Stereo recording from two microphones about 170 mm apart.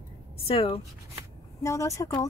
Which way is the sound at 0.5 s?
35° left (ahead or behind).